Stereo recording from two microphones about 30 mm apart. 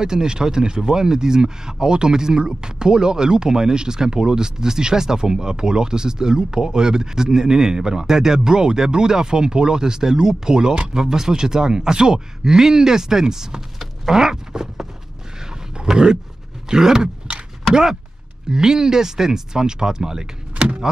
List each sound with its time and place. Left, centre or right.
0.0 s speech: right
15.9 s speech: right
18.5 s speech: right
20.5 s power windows: right